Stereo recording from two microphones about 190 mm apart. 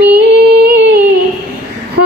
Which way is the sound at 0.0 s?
65° right (ahead or behind).